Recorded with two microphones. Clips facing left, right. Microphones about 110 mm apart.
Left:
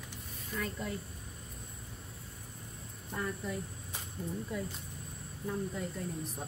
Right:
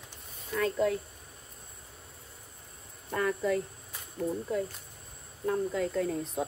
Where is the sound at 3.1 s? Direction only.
90° right.